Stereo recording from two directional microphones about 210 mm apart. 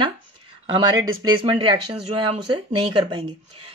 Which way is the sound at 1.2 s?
20° right (ahead or behind).